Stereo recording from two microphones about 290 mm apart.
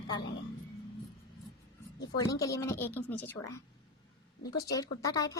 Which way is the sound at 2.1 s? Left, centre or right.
Centre.